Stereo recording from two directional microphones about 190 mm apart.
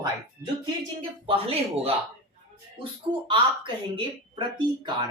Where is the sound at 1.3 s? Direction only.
30° right (ahead or behind).